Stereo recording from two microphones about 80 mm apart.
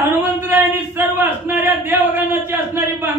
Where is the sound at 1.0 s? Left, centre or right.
Right.